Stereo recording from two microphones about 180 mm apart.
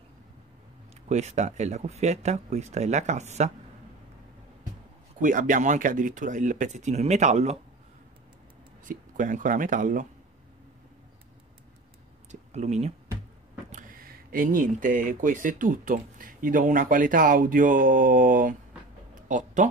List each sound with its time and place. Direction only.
1.0 s speech: 40° right (ahead or behind)
5.2 s speech: 45° right (ahead or behind)
8.8 s speech: 45° right (ahead or behind)
12.3 s speech: 40° right (ahead or behind)
13.7 s speech: 50° right (ahead or behind)